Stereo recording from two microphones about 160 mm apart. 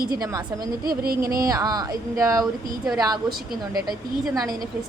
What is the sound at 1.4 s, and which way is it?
Speech, 25° right (ahead or behind).